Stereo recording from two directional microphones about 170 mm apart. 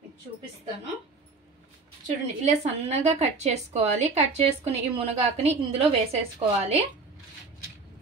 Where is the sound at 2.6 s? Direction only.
40° right (ahead or behind).